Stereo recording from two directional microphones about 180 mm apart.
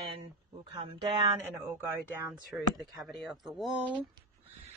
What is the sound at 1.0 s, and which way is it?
Speech, 20° right (ahead or behind).